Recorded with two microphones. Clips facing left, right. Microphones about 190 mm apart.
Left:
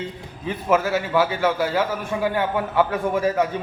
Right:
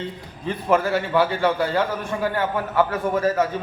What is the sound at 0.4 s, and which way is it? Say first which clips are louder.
A man's voice: even; 5° left (ahead or behind).